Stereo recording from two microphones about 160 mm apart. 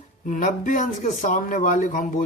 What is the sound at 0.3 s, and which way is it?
Speech, 50° left (ahead or behind).